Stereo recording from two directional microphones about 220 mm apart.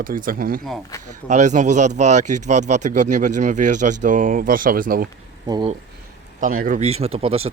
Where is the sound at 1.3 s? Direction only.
35° right (ahead or behind).